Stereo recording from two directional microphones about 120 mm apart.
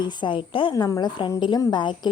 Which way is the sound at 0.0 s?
40° left (ahead or behind).